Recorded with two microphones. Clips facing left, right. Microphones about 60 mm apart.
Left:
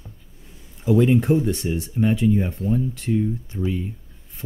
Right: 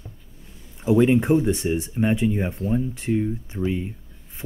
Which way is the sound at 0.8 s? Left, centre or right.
Right.